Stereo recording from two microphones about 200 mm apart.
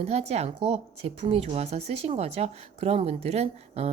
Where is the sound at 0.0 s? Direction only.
30° right (ahead or behind).